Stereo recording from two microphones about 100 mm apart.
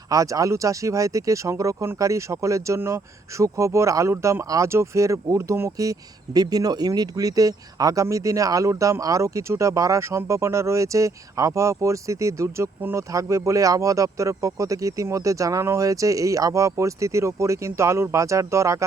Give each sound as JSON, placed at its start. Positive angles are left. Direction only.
{"t": 0.1, "sound": "speech", "side_deg": -35}